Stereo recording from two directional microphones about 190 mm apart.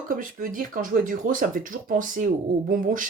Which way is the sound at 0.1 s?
45° right (ahead or behind).